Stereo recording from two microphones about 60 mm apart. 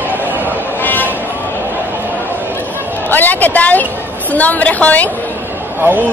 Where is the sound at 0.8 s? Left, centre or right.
Left.